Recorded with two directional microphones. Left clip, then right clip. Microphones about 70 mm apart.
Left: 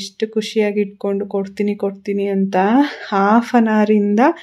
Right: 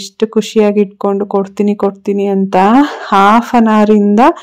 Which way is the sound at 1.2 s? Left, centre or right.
Right.